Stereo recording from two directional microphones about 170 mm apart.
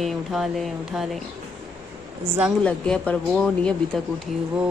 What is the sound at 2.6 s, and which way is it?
Speech, 5° left (ahead or behind).